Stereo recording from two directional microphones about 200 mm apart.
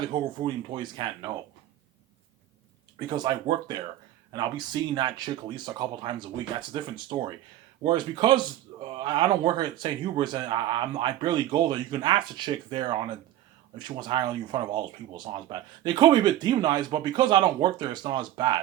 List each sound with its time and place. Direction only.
0.0 s speech: 25° right (ahead or behind)
3.1 s speech: 20° right (ahead or behind)